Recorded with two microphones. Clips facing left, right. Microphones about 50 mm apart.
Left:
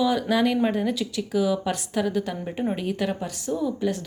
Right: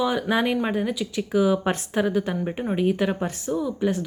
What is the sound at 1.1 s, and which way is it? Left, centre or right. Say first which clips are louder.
A woman's voice: right 5 dB; right.